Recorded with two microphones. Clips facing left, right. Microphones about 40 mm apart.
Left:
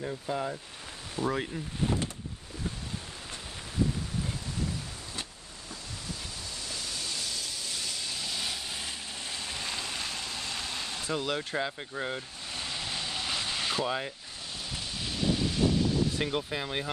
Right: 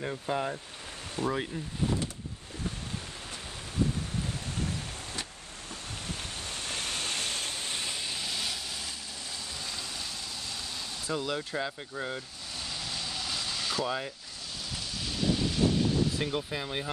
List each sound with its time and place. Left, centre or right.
0.1 s speech: centre
1.2 s speech: right
6.4 s a sound: right; by 8.5 s centre
8.6 s vehicle: left
9.3 s a sound: left
11.1 s speech: left
11.5 s speech: centre
12.5 s vehicle: left
16.2 s speech: centre